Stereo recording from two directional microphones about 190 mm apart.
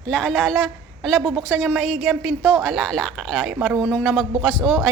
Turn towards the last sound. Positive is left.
turn(degrees=5)  # may be behind; listen again after turning